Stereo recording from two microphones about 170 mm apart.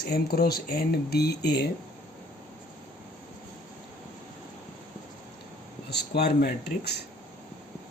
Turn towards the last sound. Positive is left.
turn(degrees=75)  # may be behind; listen again after turning